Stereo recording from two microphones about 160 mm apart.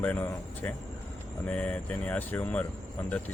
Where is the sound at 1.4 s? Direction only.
10° left (ahead or behind).